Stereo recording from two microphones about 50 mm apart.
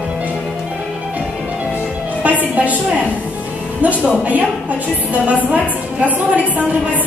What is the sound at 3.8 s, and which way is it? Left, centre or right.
Speech, right.